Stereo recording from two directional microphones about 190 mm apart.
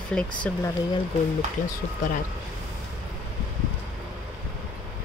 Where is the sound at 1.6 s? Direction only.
40° left (ahead or behind).